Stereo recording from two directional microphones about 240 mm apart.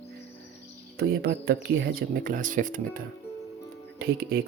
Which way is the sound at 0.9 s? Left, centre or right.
Right.